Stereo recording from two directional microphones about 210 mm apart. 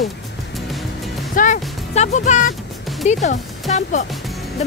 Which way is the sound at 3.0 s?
35° left (ahead or behind).